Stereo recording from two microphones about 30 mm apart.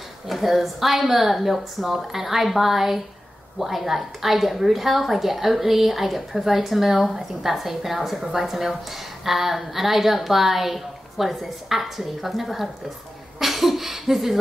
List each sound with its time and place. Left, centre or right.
0.3 s a woman's voice: centre